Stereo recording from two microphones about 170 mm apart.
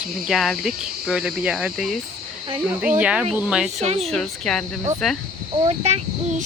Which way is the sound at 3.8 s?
35° right (ahead or behind).